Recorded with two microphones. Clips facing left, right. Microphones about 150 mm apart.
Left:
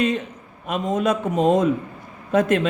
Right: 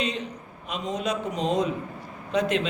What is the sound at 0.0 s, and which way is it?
A man's voice, 50° left (ahead or behind).